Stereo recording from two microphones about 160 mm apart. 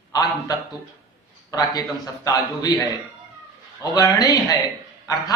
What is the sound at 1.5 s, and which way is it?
A man's voice, 20° left (ahead or behind).